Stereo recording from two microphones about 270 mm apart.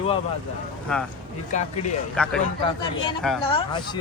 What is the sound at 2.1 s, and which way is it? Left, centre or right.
Speech, centre.